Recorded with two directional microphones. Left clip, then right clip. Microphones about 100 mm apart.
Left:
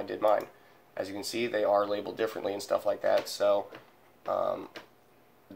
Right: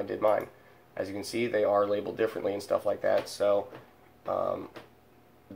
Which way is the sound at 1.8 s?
15° right (ahead or behind).